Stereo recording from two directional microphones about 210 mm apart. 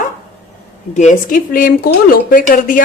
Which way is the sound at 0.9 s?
35° left (ahead or behind).